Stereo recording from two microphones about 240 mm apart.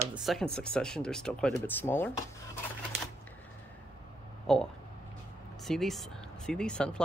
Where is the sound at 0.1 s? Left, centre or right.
Centre.